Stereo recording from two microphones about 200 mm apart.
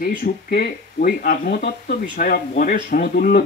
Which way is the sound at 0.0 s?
50° left (ahead or behind).